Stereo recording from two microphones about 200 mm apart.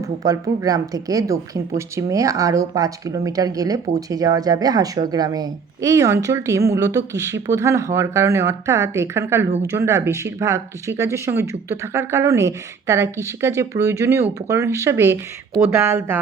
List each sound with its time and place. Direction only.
0.2 s a woman's voice: 15° right (ahead or behind)